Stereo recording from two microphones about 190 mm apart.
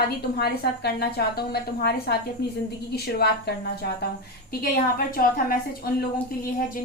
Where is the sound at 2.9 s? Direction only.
60° left (ahead or behind).